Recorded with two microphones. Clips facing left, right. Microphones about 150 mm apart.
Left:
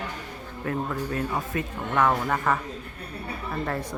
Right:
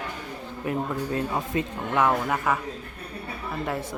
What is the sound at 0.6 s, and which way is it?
Speech, 20° right (ahead or behind).